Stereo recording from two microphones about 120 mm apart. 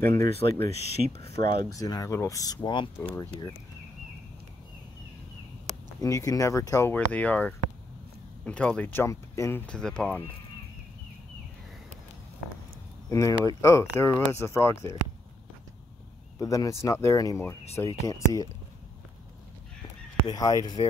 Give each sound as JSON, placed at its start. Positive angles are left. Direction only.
{"t": 0.0, "sound": "speech", "side_deg": 20}
{"t": 0.7, "sound": "speech", "side_deg": 60}
{"t": 1.7, "sound": "speech", "side_deg": 30}
{"t": 5.9, "sound": "speech", "side_deg": 25}
{"t": 6.9, "sound": "speech", "side_deg": 10}
{"t": 9.7, "sound": "speech", "side_deg": 5}
{"t": 13.1, "sound": "speech", "side_deg": 25}
{"t": 16.3, "sound": "speech", "side_deg": 30}
{"t": 20.2, "sound": "speech", "side_deg": 30}